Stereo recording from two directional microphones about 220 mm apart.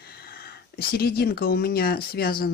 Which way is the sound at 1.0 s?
45° left (ahead or behind).